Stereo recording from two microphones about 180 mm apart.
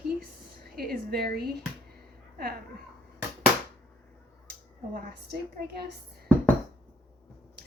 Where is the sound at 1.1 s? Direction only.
60° right (ahead or behind).